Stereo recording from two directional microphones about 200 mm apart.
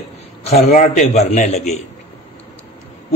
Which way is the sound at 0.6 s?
45° left (ahead or behind).